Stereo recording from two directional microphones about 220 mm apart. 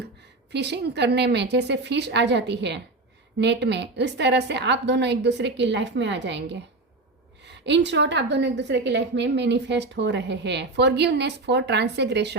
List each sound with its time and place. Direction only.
0.5 s a woman's voice: 50° right (ahead or behind)